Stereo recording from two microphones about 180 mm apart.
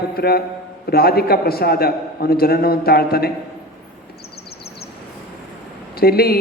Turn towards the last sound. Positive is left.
turn(degrees=60)  # may be behind; listen again after turning